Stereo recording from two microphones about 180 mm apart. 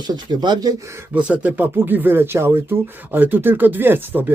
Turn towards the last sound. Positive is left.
turn(degrees=-10)  # may be behind; listen again after turning